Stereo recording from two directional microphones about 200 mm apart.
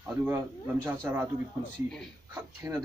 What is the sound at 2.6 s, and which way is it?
Speech, 15° right (ahead or behind).